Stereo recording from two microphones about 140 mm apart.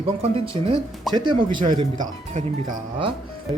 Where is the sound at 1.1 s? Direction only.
35° right (ahead or behind).